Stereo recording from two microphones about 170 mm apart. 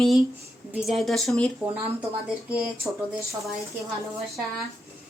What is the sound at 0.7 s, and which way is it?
Speech, centre (ahead or behind).